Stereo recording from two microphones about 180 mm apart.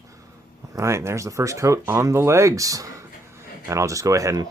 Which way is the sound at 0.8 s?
15° right (ahead or behind).